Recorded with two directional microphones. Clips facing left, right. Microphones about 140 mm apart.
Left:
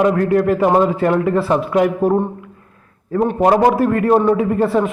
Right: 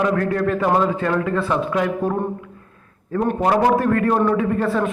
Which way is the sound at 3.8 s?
25° left (ahead or behind).